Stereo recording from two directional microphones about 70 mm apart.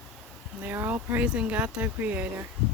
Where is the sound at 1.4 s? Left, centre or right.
Right.